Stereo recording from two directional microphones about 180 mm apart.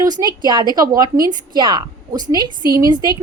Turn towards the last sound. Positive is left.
turn(degrees=-20)  # may be behind; listen again after turning